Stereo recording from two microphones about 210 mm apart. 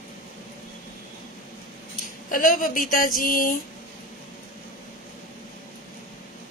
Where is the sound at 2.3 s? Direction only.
40° left (ahead or behind).